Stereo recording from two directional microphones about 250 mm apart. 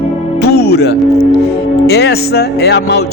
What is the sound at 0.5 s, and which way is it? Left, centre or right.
Music, left.